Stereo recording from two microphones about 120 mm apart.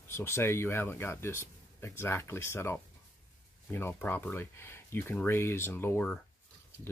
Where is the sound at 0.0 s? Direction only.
20° left (ahead or behind).